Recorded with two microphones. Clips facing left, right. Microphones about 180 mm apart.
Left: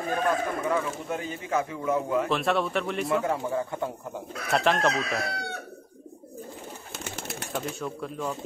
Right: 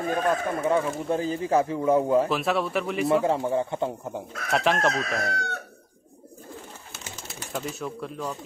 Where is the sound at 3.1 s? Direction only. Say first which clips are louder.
Right 4 dB; 25° right (ahead or behind).